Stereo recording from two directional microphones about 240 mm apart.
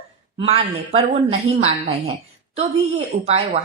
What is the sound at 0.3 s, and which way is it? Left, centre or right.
A woman's voice, right.